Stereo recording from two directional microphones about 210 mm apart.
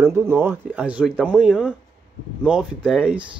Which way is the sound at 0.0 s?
10° right (ahead or behind).